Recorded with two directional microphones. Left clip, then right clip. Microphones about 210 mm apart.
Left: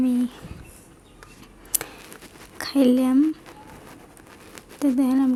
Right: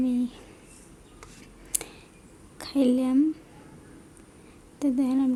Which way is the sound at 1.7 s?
10° left (ahead or behind).